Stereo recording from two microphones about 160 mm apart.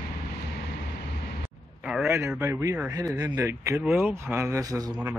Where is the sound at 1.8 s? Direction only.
10° right (ahead or behind).